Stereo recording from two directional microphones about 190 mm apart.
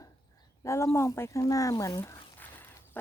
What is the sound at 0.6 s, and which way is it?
Speech, 15° left (ahead or behind).